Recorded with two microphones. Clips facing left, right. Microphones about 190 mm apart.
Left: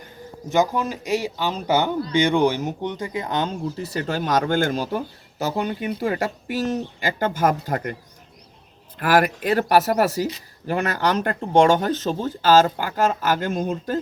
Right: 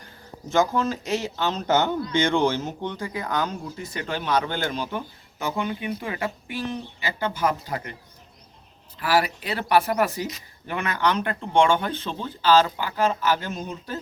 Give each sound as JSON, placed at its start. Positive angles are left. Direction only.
{"t": 0.5, "sound": "speech", "side_deg": 15}
{"t": 3.8, "sound": "speech", "side_deg": 35}
{"t": 9.0, "sound": "speech", "side_deg": 50}